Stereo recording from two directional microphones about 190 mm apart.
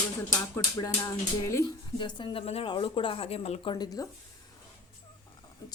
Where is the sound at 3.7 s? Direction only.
20° left (ahead or behind).